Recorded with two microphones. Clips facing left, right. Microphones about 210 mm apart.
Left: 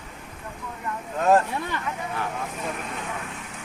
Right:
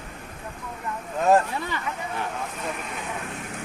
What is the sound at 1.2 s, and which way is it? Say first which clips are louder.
Vehicle: even; 10° right (ahead or behind).